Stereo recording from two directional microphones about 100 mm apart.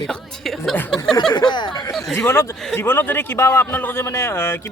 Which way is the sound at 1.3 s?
45° left (ahead or behind).